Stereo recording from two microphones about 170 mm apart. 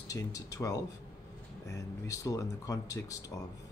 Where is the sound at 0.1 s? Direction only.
20° left (ahead or behind).